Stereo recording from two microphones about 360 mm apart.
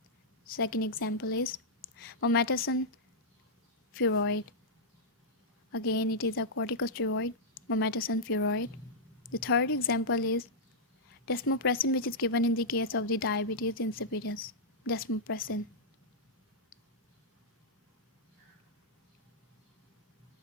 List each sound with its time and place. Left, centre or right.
0.4 s a woman's voice: left
3.9 s speech: left
5.7 s a woman's voice: left